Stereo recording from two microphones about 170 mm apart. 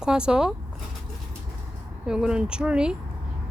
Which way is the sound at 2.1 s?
5° right (ahead or behind).